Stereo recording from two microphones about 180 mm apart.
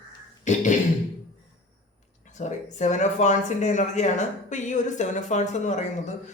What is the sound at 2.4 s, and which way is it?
A man's voice, 40° left (ahead or behind).